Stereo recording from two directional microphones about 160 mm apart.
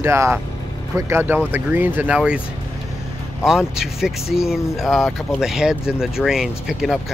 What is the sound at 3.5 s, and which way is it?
Speech, 5° right (ahead or behind).